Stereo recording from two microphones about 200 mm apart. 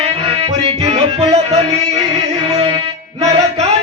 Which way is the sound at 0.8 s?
30° right (ahead or behind).